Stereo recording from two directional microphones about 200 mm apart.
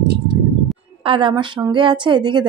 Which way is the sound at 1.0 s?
25° right (ahead or behind).